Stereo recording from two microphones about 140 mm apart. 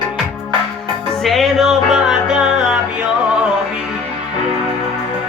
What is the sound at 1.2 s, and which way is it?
Music, centre (ahead or behind).